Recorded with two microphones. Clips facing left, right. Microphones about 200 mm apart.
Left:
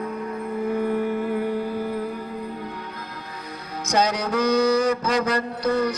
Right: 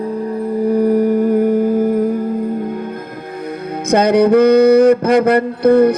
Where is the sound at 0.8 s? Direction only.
40° right (ahead or behind).